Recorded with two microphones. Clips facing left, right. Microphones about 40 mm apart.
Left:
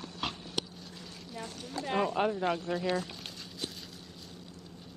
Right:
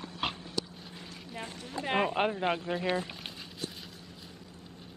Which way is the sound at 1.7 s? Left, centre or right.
Right.